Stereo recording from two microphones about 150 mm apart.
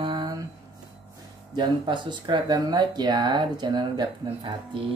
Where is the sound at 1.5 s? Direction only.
30° right (ahead or behind).